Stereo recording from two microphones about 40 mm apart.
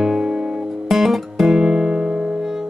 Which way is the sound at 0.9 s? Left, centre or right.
Centre.